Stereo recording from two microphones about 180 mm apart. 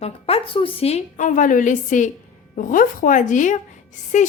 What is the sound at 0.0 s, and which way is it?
A woman's voice, 35° left (ahead or behind).